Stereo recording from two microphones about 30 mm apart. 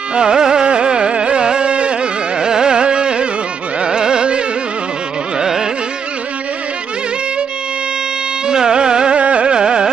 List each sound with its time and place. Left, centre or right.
0.1 s carnatic music: right
2.4 s carnatic music: right
8.5 s music: right
9.1 s carnatic music: right